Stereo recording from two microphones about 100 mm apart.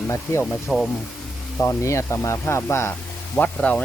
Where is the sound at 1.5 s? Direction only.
30° left (ahead or behind).